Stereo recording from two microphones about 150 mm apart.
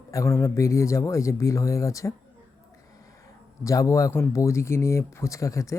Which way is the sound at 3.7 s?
20° left (ahead or behind).